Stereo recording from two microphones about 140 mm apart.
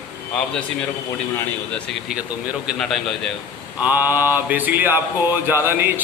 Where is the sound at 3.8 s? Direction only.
15° right (ahead or behind).